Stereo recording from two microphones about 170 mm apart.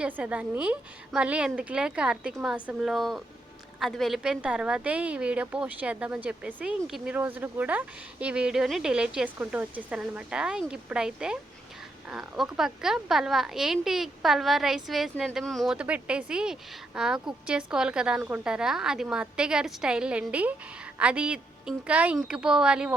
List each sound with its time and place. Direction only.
0.0 s a woman's voice: 10° right (ahead or behind)